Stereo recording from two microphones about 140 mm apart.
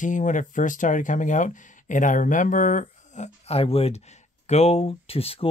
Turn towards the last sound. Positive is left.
turn(degrees=45)  # may be behind; listen again after turning